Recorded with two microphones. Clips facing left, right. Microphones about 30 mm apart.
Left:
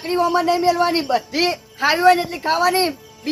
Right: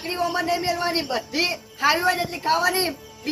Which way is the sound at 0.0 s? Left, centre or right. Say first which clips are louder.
Left 6 dB; left.